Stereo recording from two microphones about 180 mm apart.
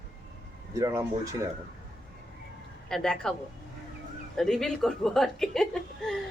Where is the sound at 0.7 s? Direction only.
15° right (ahead or behind).